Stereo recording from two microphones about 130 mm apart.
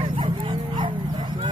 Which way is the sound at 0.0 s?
40° right (ahead or behind).